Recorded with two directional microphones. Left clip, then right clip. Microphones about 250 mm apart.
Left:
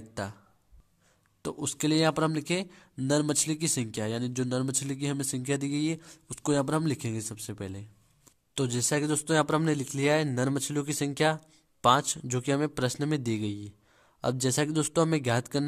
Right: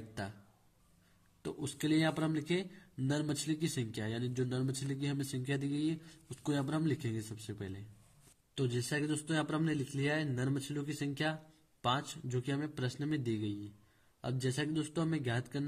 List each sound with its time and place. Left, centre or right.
1.4 s a man's voice: left